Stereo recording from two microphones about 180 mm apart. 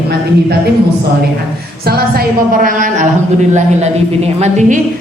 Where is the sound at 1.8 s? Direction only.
60° right (ahead or behind).